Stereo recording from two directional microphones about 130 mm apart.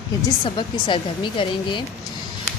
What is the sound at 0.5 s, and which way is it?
A woman's voice, 35° left (ahead or behind).